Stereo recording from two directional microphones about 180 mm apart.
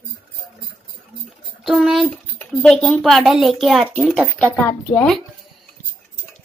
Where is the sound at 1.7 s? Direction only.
Centre (ahead or behind).